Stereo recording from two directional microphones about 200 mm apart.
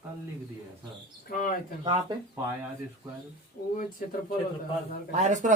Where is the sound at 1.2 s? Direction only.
40° left (ahead or behind).